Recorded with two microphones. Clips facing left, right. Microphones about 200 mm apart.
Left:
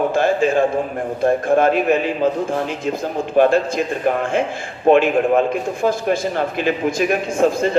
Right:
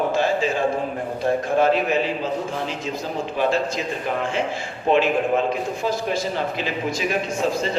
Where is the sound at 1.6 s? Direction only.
55° left (ahead or behind).